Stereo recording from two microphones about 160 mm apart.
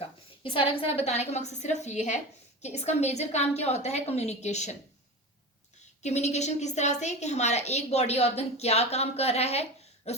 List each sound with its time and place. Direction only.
0.4 s a woman's voice: 35° left (ahead or behind)
6.0 s a woman's voice: 45° left (ahead or behind)